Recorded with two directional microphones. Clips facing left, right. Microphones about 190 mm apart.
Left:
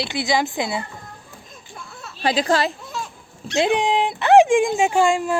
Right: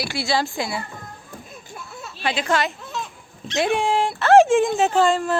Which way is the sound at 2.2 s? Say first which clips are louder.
Left 3 dB; 35° left (ahead or behind).